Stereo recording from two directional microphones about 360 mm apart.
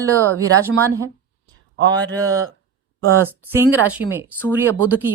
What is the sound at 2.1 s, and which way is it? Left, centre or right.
A woman's voice, centre.